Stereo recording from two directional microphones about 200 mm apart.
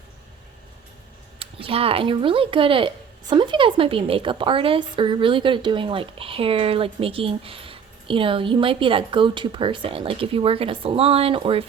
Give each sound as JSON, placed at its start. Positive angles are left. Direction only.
{"t": 1.4, "sound": "speech", "side_deg": -25}